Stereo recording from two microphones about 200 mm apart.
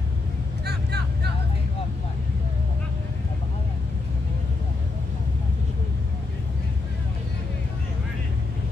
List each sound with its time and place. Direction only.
0.7 s vehicle: 55° right (ahead or behind)